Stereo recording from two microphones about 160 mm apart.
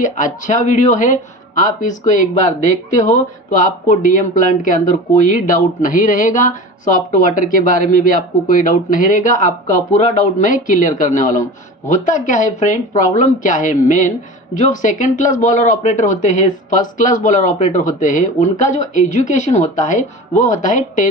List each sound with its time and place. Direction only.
0.0 s speech: 55° left (ahead or behind)